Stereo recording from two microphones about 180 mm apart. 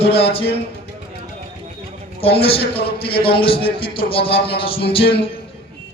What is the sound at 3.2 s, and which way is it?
Music, 30° left (ahead or behind).